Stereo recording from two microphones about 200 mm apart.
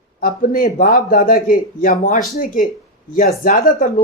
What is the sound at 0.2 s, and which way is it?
Speech, 45° left (ahead or behind).